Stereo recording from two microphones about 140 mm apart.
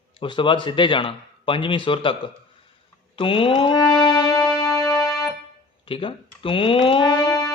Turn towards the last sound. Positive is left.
turn(degrees=20)  # may be behind; listen again after turning